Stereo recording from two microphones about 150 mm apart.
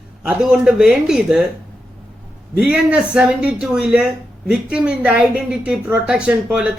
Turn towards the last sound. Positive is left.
turn(degrees=-5)  # may be behind; listen again after turning